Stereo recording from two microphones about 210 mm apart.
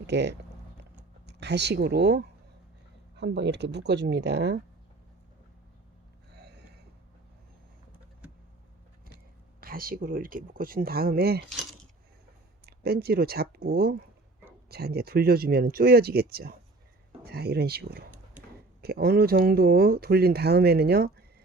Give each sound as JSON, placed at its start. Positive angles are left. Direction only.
{"t": 0.1, "sound": "speech", "side_deg": -55}
{"t": 6.3, "sound": "a sound", "side_deg": -50}
{"t": 9.6, "sound": "speech", "side_deg": -45}
{"t": 11.4, "sound": "speech", "side_deg": 0}
{"t": 12.6, "sound": "speech", "side_deg": -45}